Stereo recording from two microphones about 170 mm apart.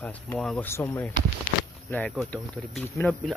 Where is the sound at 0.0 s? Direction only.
5° left (ahead or behind).